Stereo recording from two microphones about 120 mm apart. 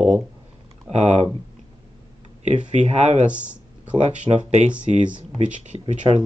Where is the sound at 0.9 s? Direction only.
70° right (ahead or behind).